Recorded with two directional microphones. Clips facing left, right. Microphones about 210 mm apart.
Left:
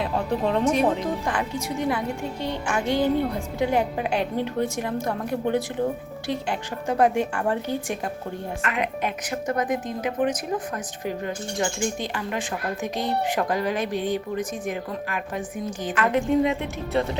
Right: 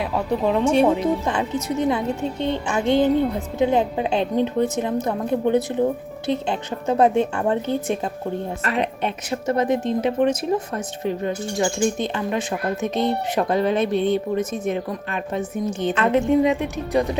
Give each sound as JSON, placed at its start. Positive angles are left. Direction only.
{"t": 0.4, "sound": "speech", "side_deg": -5}
{"t": 0.7, "sound": "speech", "side_deg": -25}